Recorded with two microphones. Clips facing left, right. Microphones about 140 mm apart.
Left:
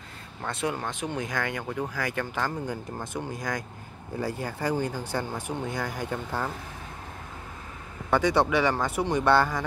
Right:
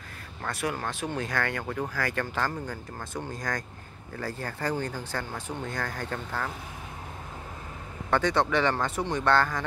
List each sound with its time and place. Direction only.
0.4 s speech: 25° left (ahead or behind)
8.1 s speech: 10° left (ahead or behind)